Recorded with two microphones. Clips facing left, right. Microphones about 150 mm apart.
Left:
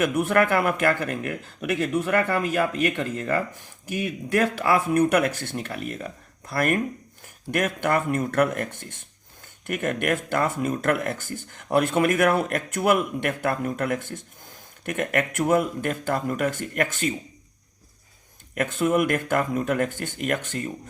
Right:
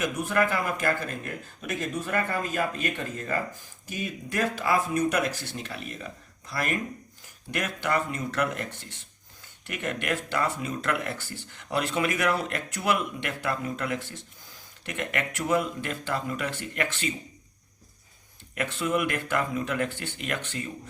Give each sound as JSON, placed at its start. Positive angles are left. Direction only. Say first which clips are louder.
{"t": 0.0, "sound": "speech", "louder": "left 5 dB", "side_deg": 60}
{"t": 18.5, "sound": "speech", "louder": "left 5 dB", "side_deg": 50}